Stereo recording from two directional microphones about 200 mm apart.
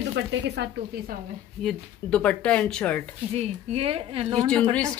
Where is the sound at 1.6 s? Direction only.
5° left (ahead or behind).